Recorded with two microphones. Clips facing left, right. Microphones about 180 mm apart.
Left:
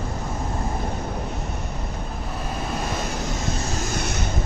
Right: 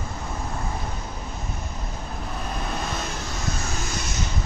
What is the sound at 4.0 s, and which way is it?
Vehicle, 55° left (ahead or behind).